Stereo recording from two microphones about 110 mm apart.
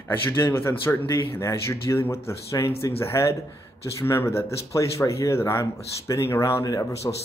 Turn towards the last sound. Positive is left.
turn(degrees=30)  # may be behind; listen again after turning